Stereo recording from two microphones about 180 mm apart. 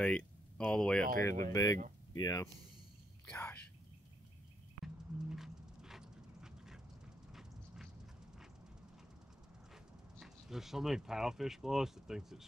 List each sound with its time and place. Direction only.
0.0 s speech: 5° left (ahead or behind)
1.0 s speech: 45° right (ahead or behind)
1.5 s speech: 20° left (ahead or behind)
4.8 s clip-clop: centre (ahead or behind)
7.3 s a sound: centre (ahead or behind)
10.1 s speech: centre (ahead or behind)